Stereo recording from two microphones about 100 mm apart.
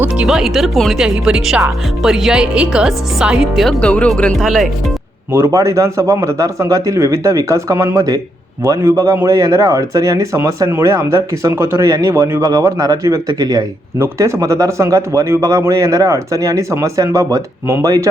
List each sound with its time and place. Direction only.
0.2 s speech: 5° right (ahead or behind)
3.8 s speech: 10° left (ahead or behind)
5.3 s speech: 30° right (ahead or behind)
14.0 s speech: 30° right (ahead or behind)